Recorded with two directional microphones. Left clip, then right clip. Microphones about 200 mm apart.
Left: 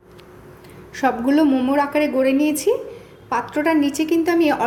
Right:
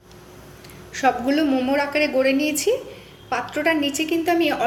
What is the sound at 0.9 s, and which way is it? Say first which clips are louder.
A woman's voice: left 1 dB; 50° left (ahead or behind).